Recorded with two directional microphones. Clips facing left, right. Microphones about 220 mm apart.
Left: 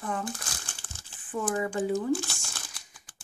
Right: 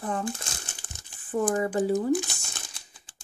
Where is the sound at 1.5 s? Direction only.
35° right (ahead or behind).